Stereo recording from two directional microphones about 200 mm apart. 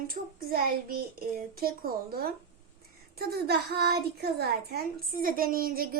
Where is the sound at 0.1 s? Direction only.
45° right (ahead or behind).